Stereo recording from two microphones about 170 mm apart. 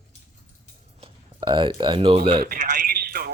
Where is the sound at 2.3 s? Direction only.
60° right (ahead or behind).